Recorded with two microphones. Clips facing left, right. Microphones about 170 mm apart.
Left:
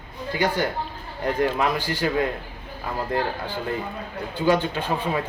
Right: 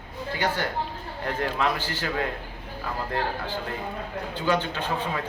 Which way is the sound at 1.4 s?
15° left (ahead or behind).